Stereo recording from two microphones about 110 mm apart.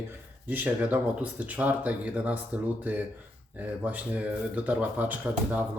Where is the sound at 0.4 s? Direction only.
15° right (ahead or behind).